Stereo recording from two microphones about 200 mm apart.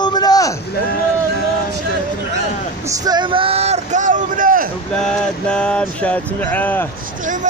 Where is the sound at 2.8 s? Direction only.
20° right (ahead or behind); by 4.7 s 45° right (ahead or behind).